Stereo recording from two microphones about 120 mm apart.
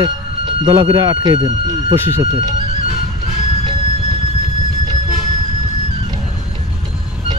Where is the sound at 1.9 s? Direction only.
20° right (ahead or behind).